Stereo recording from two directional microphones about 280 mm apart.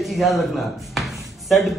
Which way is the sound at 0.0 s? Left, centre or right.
Centre.